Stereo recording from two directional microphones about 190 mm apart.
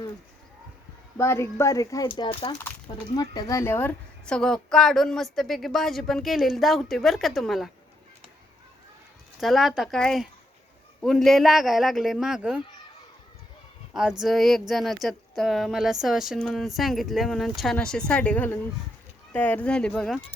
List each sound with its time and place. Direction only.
1.2 s a woman's voice: 15° left (ahead or behind)
9.4 s a woman's voice: centre (ahead or behind)
13.9 s a woman's voice: 5° right (ahead or behind)